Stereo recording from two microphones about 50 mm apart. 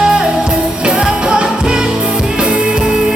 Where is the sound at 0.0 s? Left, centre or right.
Centre.